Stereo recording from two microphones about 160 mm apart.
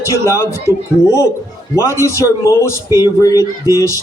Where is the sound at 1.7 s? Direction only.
15° left (ahead or behind).